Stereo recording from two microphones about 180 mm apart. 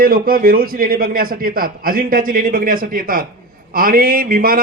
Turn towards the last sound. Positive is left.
turn(degrees=-55)  # may be behind; listen again after turning